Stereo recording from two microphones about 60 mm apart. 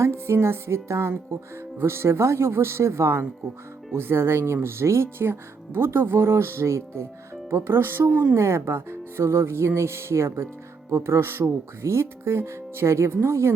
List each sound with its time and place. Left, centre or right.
0.0 s speech: right
7.5 s speech: right
8.1 s a woman's voice: right
8.4 s speech: right